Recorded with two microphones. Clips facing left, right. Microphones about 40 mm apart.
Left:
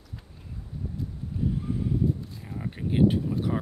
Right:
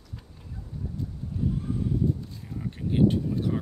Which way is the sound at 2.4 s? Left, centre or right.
Left.